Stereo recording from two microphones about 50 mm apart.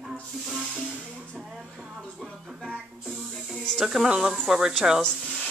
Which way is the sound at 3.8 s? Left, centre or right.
Centre.